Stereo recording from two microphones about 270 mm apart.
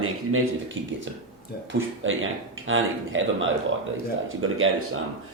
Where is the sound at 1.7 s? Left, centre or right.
Right.